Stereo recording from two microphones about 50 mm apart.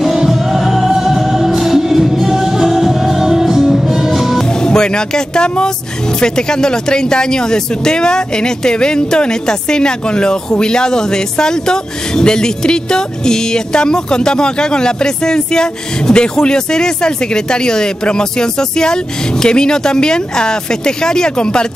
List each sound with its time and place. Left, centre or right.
0.0 s music: centre
4.5 s speech: centre